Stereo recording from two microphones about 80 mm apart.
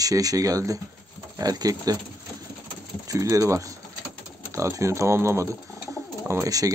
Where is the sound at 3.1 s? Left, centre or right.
Right.